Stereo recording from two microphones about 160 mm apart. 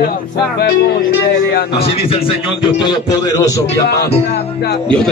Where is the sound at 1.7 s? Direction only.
35° left (ahead or behind).